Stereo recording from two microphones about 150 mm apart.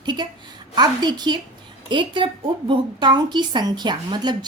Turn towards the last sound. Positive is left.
turn(degrees=-30)  # may be behind; listen again after turning